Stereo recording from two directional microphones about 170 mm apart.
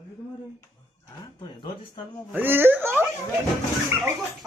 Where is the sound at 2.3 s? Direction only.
10° right (ahead or behind).